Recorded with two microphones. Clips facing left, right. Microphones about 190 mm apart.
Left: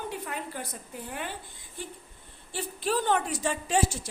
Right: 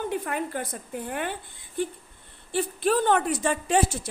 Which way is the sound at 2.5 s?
55° right (ahead or behind).